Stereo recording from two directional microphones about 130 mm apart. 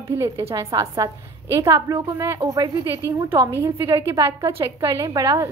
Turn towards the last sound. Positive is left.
turn(degrees=-30)  # may be behind; listen again after turning